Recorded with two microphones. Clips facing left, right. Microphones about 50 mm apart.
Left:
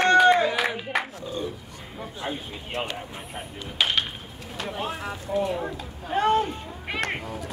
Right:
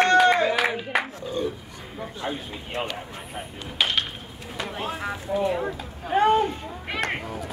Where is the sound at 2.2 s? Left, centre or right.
Centre.